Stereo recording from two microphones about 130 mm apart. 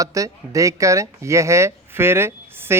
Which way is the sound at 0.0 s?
25° right (ahead or behind).